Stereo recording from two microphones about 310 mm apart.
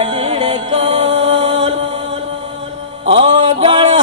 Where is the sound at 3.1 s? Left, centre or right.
Centre.